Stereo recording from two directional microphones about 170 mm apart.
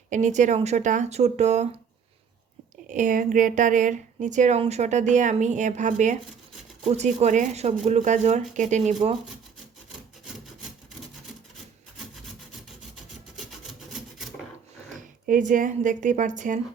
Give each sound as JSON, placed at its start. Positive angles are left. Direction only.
{"t": 0.1, "sound": "a woman's voice", "side_deg": -45}
{"t": 2.8, "sound": "a woman's voice", "side_deg": -50}
{"t": 14.9, "sound": "speech", "side_deg": -50}